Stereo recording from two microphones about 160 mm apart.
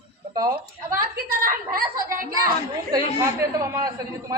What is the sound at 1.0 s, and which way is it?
Speech, 65° right (ahead or behind).